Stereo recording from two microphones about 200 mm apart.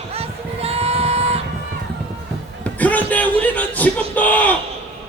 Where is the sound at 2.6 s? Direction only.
5° left (ahead or behind).